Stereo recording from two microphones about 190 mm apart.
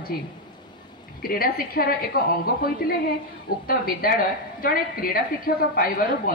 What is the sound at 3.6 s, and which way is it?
A woman's voice, 50° left (ahead or behind).